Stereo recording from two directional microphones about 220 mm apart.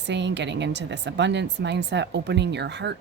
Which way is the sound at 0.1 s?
50° right (ahead or behind).